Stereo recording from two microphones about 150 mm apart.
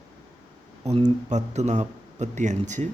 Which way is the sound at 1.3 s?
50° right (ahead or behind).